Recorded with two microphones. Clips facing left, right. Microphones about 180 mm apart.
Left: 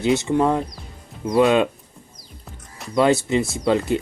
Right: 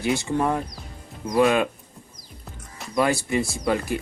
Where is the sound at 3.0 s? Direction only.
20° left (ahead or behind).